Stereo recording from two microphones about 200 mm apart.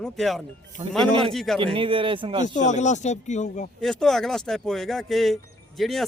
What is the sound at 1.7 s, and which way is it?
Speech, 25° right (ahead or behind).